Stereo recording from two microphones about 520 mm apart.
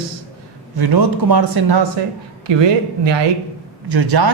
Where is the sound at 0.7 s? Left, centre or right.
Right.